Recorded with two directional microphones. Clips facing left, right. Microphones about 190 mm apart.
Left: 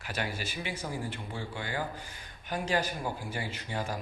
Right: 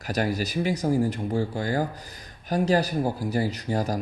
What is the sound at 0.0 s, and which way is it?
Speech, 40° right (ahead or behind).